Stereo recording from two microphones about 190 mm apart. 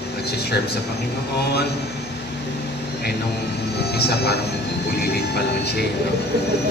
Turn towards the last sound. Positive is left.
turn(degrees=60)  # may be behind; listen again after turning